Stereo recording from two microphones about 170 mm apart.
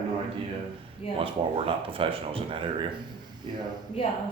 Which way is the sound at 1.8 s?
30° right (ahead or behind).